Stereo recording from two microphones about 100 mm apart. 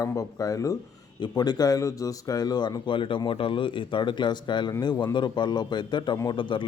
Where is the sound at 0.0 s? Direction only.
35° left (ahead or behind).